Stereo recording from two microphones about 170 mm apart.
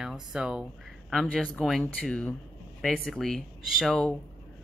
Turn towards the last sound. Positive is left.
turn(degrees=5)  # may be behind; listen again after turning